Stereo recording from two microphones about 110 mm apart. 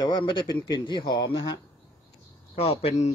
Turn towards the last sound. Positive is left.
turn(degrees=80)